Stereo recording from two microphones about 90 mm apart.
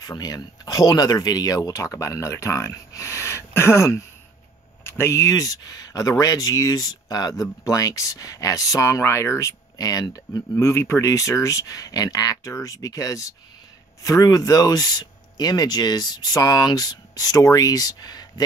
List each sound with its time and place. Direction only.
0.0 s speech: 45° left (ahead or behind)
10.6 s speech: 30° left (ahead or behind)